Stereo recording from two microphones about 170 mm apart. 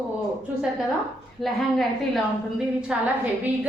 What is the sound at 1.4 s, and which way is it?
A woman's voice, centre (ahead or behind).